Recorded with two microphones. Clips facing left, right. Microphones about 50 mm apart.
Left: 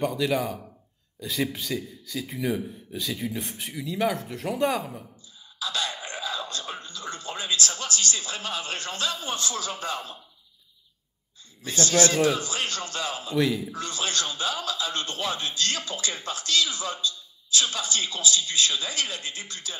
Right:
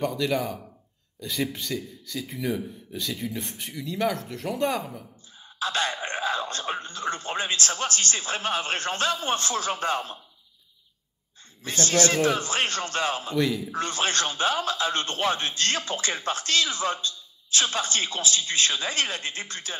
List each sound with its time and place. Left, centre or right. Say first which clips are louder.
0.0 s speech: left 1 dB; centre
5.6 s speech: right 4 dB; right
11.6 s a man's voice: left 1 dB; right
13.4 s speech: left 2 dB; centre
13.7 s a man's voice: right 4 dB; right